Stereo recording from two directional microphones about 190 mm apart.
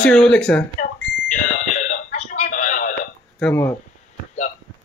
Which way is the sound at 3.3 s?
5° left (ahead or behind).